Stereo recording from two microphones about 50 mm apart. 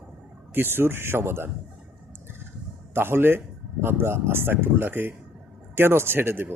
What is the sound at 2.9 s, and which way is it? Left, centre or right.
Speech, right.